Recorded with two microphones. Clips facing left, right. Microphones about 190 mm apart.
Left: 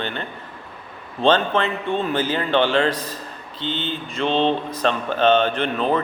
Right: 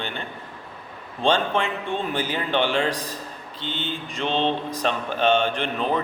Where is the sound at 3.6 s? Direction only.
45° right (ahead or behind).